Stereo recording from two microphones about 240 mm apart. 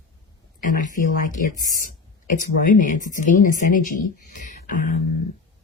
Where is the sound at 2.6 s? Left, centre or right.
Left.